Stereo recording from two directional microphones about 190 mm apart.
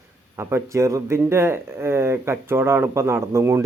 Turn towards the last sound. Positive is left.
turn(degrees=-15)  # may be behind; listen again after turning